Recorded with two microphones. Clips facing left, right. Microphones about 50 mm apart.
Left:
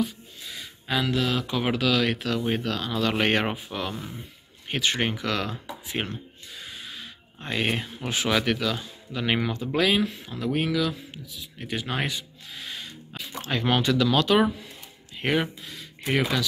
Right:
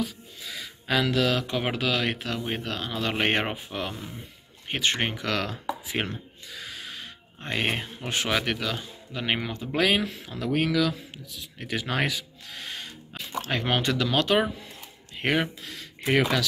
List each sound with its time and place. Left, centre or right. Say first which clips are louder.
0.8 s speech: right 2 dB; right
1.6 s speech: left 3 dB; right
5.2 s speech: even; right
6.6 s a sound: right 1 dB; right
7.5 s speech: left 1 dB; right
9.8 s speech: left 1 dB; right
10.0 s speech: left 1 dB; right
15.6 s a sound: right 2 dB; right
16.2 s speech: right 1 dB; right